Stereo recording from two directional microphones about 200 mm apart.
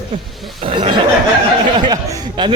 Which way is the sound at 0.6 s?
25° right (ahead or behind).